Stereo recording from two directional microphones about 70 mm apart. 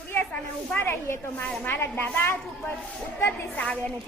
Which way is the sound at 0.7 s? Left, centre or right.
Left.